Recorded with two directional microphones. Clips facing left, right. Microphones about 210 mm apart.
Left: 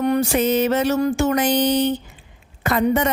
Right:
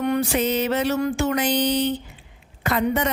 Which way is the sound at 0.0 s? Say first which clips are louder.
Left 3 dB; 40° left (ahead or behind).